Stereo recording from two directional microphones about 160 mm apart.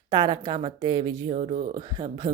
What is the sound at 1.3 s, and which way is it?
Speech, 45° right (ahead or behind).